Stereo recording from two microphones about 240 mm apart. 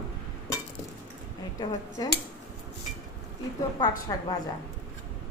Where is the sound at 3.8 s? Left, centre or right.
Centre.